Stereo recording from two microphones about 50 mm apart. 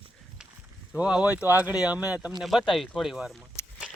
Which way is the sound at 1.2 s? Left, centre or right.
Right.